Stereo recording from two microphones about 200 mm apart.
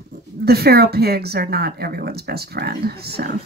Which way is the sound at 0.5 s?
50° right (ahead or behind).